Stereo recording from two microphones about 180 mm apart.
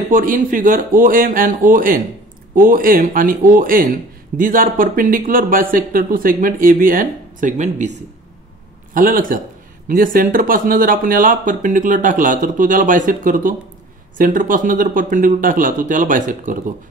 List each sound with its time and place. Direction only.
0.1 s speech: 50° right (ahead or behind)
8.9 s speech: 50° right (ahead or behind)